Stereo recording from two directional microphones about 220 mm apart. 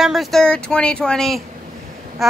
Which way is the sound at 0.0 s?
Centre (ahead or behind).